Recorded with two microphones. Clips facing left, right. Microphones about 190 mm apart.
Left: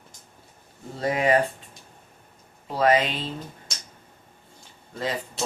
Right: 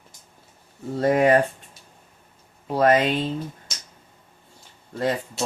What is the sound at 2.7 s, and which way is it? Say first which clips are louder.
Speech: right 2 dB; 50° right (ahead or behind).